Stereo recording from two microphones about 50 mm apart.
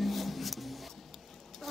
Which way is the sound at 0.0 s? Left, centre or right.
Centre.